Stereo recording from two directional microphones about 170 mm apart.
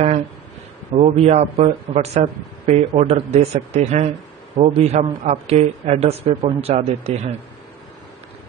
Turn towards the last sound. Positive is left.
turn(degrees=-40)  # may be behind; listen again after turning